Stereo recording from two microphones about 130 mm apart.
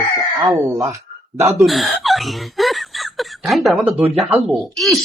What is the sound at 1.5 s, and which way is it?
Laughter, centre (ahead or behind).